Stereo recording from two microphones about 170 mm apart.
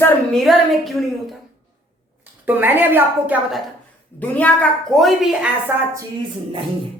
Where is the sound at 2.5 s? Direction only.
10° right (ahead or behind).